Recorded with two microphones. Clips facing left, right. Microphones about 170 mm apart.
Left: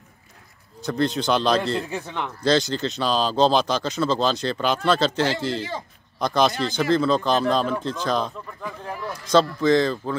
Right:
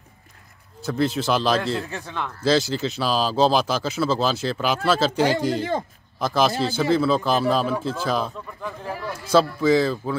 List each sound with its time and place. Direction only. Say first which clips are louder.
0.8 s speech: even; 5° right (ahead or behind)
1.9 s a man's voice: left 1 dB; 15° left (ahead or behind)
2.4 s speech: even; 5° right (ahead or behind)
5.6 s a man's voice: right 6 dB; 55° right (ahead or behind)
6.1 s speech: even; 5° right (ahead or behind)
8.6 s a sound: right 2 dB; 5° right (ahead or behind)
9.2 s speech: even; 5° right (ahead or behind)